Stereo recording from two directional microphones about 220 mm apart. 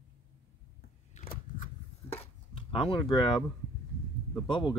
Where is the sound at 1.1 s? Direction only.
30° left (ahead or behind).